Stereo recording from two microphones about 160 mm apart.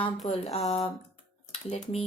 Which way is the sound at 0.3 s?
40° left (ahead or behind).